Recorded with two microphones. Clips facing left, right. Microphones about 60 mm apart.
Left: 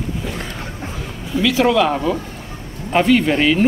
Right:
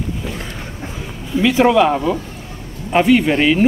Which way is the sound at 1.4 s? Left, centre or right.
Right.